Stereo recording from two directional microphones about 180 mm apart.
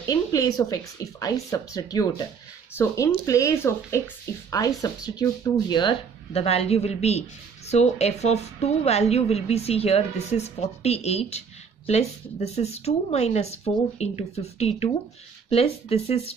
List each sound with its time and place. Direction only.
0.0 s speech: 20° left (ahead or behind)
3.3 s speech: 15° left (ahead or behind); by 16.3 s 35° left (ahead or behind)